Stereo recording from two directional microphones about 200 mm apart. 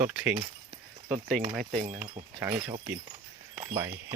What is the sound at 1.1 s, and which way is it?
Speech, centre (ahead or behind).